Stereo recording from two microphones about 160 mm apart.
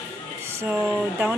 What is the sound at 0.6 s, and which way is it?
Speech, 10° right (ahead or behind).